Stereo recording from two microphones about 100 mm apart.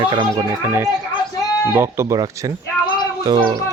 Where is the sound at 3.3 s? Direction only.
55° right (ahead or behind).